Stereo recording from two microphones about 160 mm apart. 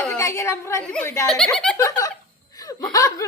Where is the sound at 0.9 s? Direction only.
15° left (ahead or behind).